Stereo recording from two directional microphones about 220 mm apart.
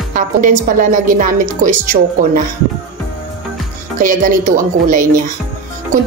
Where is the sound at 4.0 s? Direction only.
35° right (ahead or behind).